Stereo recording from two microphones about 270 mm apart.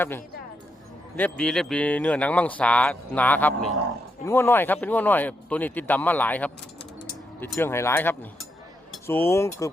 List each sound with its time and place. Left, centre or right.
1.1 s speech: centre